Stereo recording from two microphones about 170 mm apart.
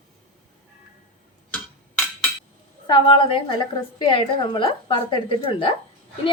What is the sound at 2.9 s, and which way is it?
A woman's voice, 30° left (ahead or behind).